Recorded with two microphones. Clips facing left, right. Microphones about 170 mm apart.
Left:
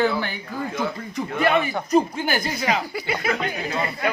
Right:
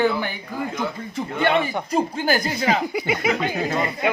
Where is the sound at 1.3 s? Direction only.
25° right (ahead or behind).